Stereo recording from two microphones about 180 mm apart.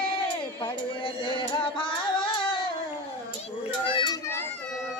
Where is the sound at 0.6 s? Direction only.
25° left (ahead or behind).